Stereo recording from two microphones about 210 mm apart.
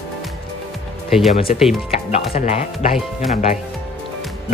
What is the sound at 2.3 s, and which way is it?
Speech, 30° left (ahead or behind).